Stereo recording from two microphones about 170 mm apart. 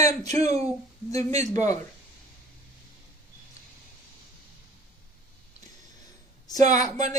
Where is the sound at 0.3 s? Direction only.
40° right (ahead or behind).